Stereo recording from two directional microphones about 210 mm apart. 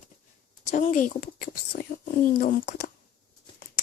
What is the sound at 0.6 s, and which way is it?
Speech, 35° left (ahead or behind).